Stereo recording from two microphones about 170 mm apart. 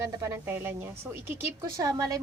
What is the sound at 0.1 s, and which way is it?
A woman's voice, 15° right (ahead or behind).